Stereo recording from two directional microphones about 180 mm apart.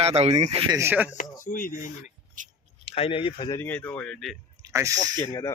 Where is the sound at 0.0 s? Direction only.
35° right (ahead or behind).